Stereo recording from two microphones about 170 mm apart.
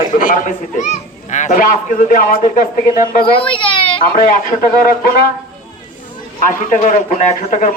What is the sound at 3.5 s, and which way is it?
Baby cry, 30° left (ahead or behind).